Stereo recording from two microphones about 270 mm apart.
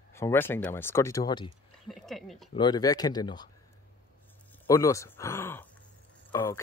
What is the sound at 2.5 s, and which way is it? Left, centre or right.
Speech, centre.